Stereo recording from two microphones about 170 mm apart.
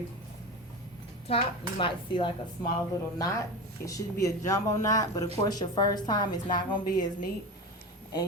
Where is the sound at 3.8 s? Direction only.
20° left (ahead or behind).